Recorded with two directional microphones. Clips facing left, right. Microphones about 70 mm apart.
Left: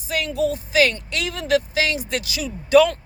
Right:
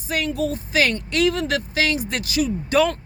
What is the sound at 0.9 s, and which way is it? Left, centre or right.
Speech, right.